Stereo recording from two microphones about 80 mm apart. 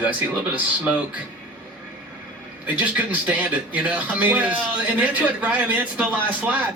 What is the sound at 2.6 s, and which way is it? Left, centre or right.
A man's voice, centre.